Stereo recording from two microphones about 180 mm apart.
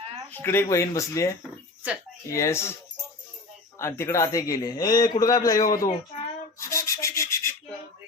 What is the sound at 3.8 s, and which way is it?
A man's voice, 15° left (ahead or behind).